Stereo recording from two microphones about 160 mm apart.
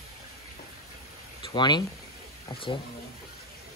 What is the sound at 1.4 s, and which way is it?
Speech, 30° left (ahead or behind).